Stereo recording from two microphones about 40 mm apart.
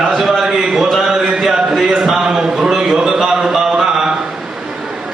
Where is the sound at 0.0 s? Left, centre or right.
Centre.